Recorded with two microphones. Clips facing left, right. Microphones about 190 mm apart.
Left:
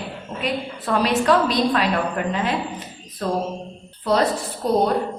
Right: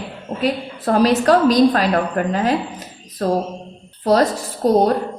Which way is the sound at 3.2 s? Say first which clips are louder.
Right 5 dB; 45° right (ahead or behind).